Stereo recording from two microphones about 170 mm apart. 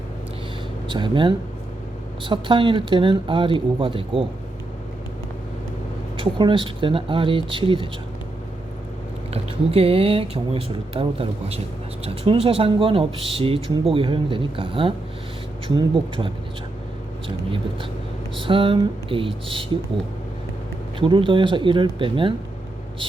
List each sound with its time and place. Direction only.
0.9 s speech: 30° right (ahead or behind)
6.1 s speech: 30° right (ahead or behind)
9.3 s speech: 35° right (ahead or behind)
21.0 s speech: 30° right (ahead or behind)